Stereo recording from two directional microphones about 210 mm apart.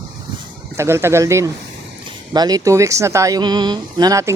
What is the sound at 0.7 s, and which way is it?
Speech, 10° right (ahead or behind).